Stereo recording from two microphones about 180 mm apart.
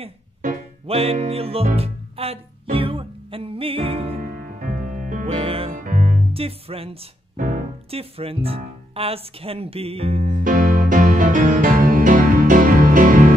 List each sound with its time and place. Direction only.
0.4 s music: 50° right (ahead or behind)
0.8 s speech: 35° right (ahead or behind)
1.8 s music: 35° right (ahead or behind)
4.2 s music: 50° right (ahead or behind)
5.2 s music: 30° right (ahead or behind)
5.7 s music: 50° right (ahead or behind)
6.3 s speech: 30° right (ahead or behind)
7.3 s music: 50° right (ahead or behind)
7.9 s speech: 35° right (ahead or behind)
10.2 s music: 50° right (ahead or behind)